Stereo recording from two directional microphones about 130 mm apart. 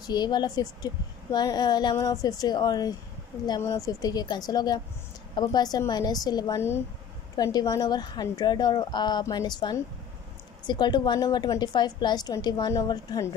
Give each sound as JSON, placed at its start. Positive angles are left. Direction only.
{"t": 0.0, "sound": "a woman's voice", "side_deg": 35}